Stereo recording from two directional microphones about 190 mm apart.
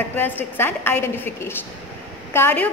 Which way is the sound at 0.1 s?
10° left (ahead or behind).